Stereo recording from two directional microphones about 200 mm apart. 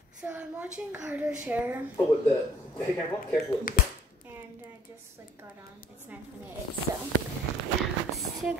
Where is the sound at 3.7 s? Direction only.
45° left (ahead or behind).